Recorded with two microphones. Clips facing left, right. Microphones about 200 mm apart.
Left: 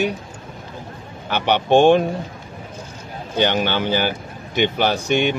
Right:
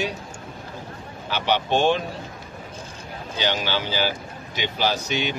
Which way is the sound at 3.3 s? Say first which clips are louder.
Left 6 dB; 55° left (ahead or behind).